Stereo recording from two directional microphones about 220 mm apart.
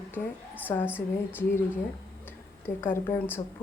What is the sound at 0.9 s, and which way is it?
Speech, 5° right (ahead or behind).